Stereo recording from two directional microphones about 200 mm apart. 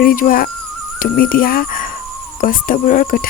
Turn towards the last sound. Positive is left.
turn(degrees=45)  # may be behind; listen again after turning